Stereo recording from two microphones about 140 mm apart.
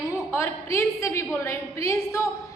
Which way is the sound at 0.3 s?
15° left (ahead or behind).